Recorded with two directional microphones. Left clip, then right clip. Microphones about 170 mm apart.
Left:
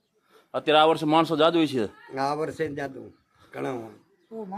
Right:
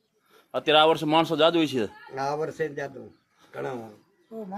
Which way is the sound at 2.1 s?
25° left (ahead or behind).